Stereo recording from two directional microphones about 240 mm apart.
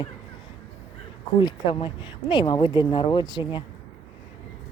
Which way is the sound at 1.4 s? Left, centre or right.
Centre.